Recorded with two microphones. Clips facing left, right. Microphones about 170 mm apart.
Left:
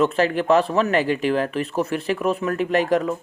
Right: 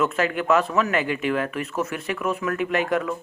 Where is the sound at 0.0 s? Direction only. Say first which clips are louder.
Left 4 dB; 35° left (ahead or behind).